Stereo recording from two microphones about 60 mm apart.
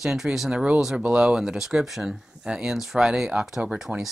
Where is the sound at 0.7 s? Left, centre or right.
Centre.